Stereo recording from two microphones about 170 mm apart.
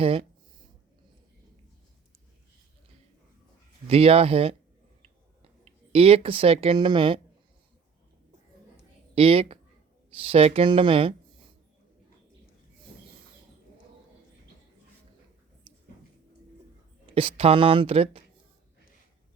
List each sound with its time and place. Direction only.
0.0 s speech: 35° right (ahead or behind)
3.8 s speech: 35° right (ahead or behind)
5.0 s a sound: 35° right (ahead or behind)
9.1 s speech: 35° right (ahead or behind)
17.1 s speech: 35° right (ahead or behind)